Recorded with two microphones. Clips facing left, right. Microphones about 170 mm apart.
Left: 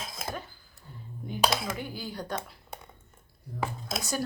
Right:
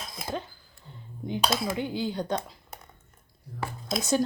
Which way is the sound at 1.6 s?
20° right (ahead or behind).